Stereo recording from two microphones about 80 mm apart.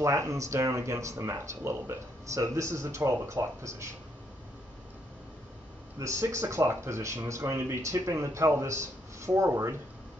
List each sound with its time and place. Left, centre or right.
0.0 s speech: right
5.9 s speech: right